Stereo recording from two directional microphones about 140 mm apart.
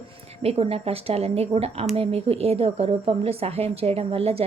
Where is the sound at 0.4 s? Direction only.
45° right (ahead or behind).